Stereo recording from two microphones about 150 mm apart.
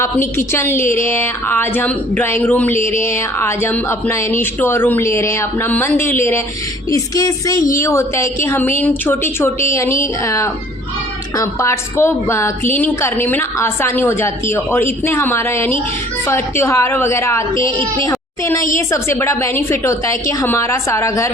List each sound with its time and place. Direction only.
0.3 s a woman's voice: 15° left (ahead or behind)